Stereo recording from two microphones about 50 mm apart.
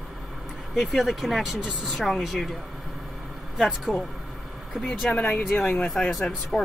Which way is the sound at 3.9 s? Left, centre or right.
Centre.